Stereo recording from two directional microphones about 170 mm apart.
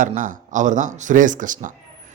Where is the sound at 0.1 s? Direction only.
50° right (ahead or behind).